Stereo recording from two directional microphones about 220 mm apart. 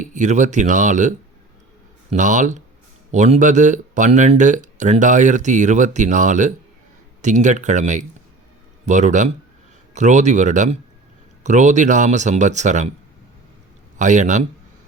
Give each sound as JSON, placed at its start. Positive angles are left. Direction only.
{"t": 0.0, "sound": "speech", "side_deg": -35}
{"t": 14.0, "sound": "speech", "side_deg": -35}